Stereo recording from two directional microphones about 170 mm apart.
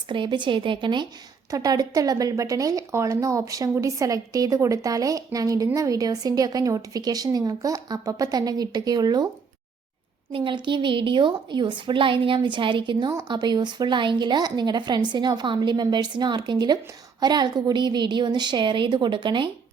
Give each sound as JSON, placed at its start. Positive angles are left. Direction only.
{"t": 0.1, "sound": "speech", "side_deg": -30}
{"t": 10.3, "sound": "speech", "side_deg": -30}